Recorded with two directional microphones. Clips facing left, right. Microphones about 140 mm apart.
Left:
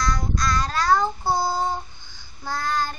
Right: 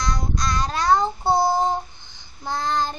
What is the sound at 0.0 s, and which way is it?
Child singing, 20° right (ahead or behind).